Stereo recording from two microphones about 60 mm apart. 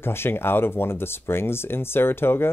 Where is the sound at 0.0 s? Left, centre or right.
Left.